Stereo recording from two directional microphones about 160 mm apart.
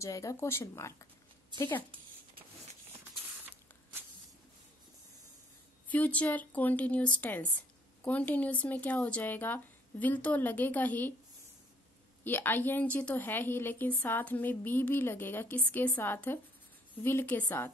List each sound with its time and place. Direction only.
0.0 s a woman's voice: 20° left (ahead or behind)
1.9 s a sound: 35° right (ahead or behind)
5.9 s a woman's voice: 10° left (ahead or behind)
12.3 s a woman's voice: 10° left (ahead or behind)